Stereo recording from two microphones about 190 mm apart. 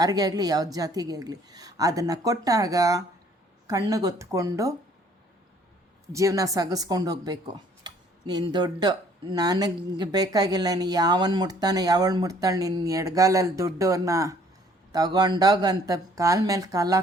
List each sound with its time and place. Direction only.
0.0 s speech: 20° right (ahead or behind)
6.1 s speech: 15° right (ahead or behind)